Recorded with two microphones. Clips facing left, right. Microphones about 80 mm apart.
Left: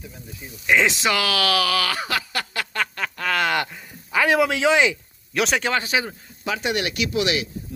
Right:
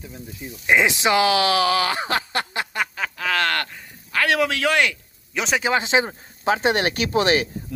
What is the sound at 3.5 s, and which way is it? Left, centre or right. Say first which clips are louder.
Speech: left 2 dB; centre.